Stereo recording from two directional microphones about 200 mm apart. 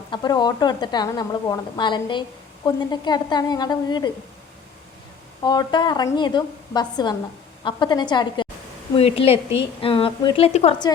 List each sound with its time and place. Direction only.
0.1 s a woman's voice: 20° left (ahead or behind)
5.4 s a woman's voice: 20° left (ahead or behind)